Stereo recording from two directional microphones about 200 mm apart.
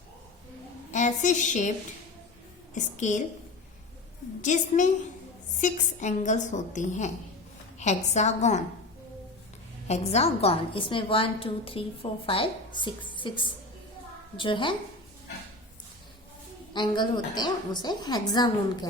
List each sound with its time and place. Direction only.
0.9 s a woman's voice: 35° left (ahead or behind)
2.7 s a woman's voice: 35° left (ahead or behind)
4.4 s a woman's voice: 40° left (ahead or behind)
9.8 s a woman's voice: 35° left (ahead or behind)
16.7 s a woman's voice: 20° left (ahead or behind)